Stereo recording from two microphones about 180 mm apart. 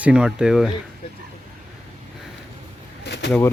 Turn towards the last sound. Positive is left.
turn(degrees=75)  # may be behind; listen again after turning